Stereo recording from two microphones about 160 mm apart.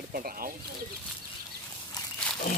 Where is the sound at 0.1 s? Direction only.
65° right (ahead or behind).